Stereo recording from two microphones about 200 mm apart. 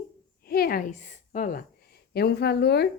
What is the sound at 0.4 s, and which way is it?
A woman's voice, 50° left (ahead or behind).